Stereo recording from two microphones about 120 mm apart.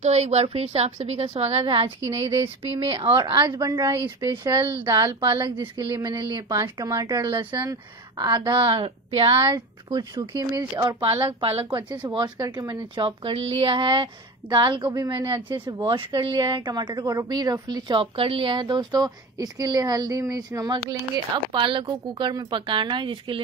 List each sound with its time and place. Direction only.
0.0 s a woman's voice: 65° right (ahead or behind); by 6.6 s 40° right (ahead or behind)
6.6 s a woman's voice: 30° right (ahead or behind); by 9.3 s 50° right (ahead or behind)
9.3 s a woman's voice: 30° right (ahead or behind); by 11.8 s 50° right (ahead or behind)
11.9 s a woman's voice: 35° right (ahead or behind)
17.9 s a woman's voice: 50° right (ahead or behind); by 21.0 s 30° right (ahead or behind)
21.5 s a woman's voice: 45° right (ahead or behind)